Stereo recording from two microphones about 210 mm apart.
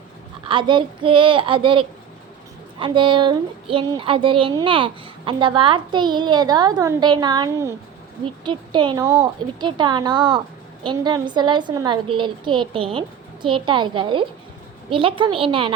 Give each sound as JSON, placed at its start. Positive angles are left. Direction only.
{"t": 0.4, "sound": "speech", "side_deg": -25}